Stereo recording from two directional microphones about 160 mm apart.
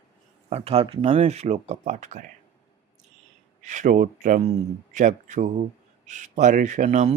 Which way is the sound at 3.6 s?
50° right (ahead or behind).